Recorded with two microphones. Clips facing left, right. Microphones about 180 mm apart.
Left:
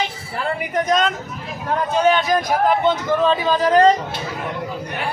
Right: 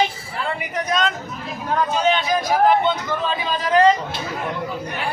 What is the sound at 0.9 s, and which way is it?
Speech, 50° left (ahead or behind).